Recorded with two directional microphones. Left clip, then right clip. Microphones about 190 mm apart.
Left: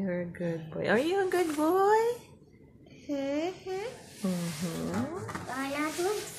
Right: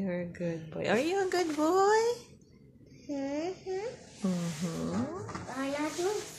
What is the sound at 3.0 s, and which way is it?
Speech, 10° left (ahead or behind).